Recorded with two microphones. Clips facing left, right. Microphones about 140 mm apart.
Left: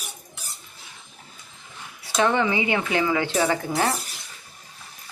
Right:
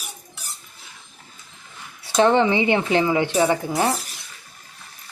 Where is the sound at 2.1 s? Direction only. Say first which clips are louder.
Right 5 dB; 30° right (ahead or behind).